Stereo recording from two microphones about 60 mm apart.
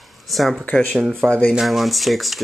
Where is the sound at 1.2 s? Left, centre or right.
Centre.